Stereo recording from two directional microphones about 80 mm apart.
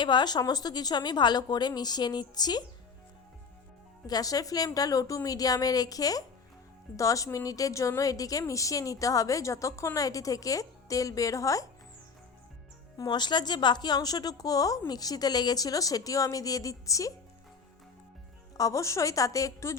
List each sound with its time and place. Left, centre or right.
0.0 s speech: left
4.0 s a woman's voice: left
13.1 s a woman's voice: left
18.5 s a woman's voice: left